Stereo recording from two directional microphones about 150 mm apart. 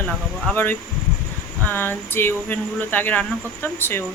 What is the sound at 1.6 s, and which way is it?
Speech, 15° left (ahead or behind).